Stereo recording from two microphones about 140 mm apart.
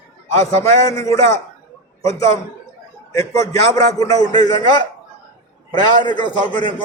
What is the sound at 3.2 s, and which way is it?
A man's voice, 25° left (ahead or behind).